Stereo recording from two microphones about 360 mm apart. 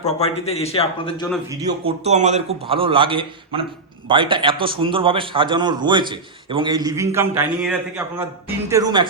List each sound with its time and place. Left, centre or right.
0.0 s a man's voice: centre
1.3 s a man's voice: centre